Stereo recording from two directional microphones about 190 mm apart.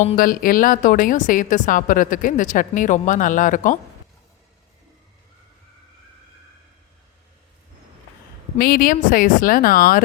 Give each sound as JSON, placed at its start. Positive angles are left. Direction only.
{"t": 0.2, "sound": "speech", "side_deg": 50}
{"t": 8.5, "sound": "speech", "side_deg": 50}